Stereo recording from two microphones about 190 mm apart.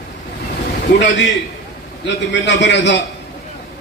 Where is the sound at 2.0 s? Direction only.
65° left (ahead or behind).